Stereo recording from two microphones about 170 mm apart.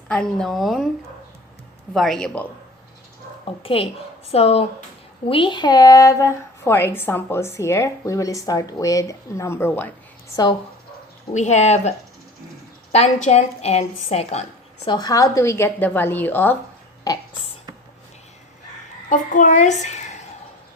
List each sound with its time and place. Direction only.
0.1 s a woman's voice: 5° left (ahead or behind)
1.9 s a woman's voice: centre (ahead or behind)
3.6 s a woman's voice: 35° left (ahead or behind); by 9.9 s 10° left (ahead or behind)
11.3 s speech: 45° left (ahead or behind)
14.8 s a woman's voice: 25° left (ahead or behind)
19.0 s a child's voice: 50° left (ahead or behind)
19.8 s a sound: 45° left (ahead or behind)